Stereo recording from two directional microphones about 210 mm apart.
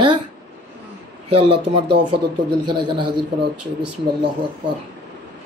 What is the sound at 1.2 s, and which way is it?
Speech, 25° right (ahead or behind).